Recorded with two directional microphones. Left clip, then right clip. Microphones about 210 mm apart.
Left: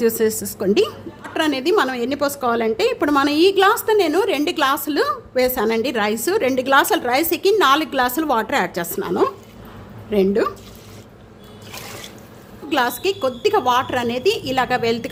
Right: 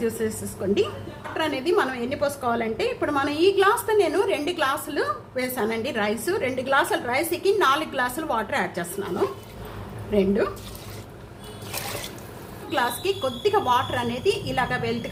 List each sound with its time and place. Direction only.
0.0 s a woman's voice: 50° left (ahead or behind)
12.7 s a woman's voice: 45° left (ahead or behind)